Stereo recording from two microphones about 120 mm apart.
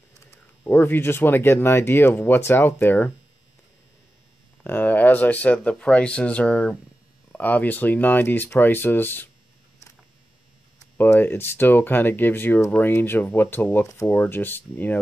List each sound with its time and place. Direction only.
0.3 s speech: 15° left (ahead or behind)
4.6 s speech: 15° left (ahead or behind)
11.0 s speech: 15° left (ahead or behind)